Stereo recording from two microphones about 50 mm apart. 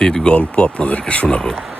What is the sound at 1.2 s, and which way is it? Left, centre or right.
Speech, centre.